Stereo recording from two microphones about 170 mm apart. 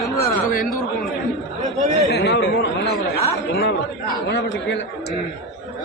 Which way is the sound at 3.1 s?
65° left (ahead or behind).